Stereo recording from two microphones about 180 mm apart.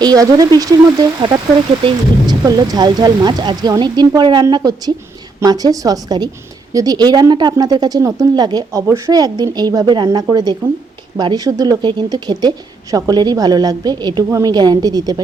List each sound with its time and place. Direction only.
0.0 s a woman's voice: 20° right (ahead or behind)